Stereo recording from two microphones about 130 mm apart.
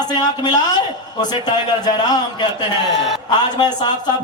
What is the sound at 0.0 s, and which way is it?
A man's voice, 30° left (ahead or behind).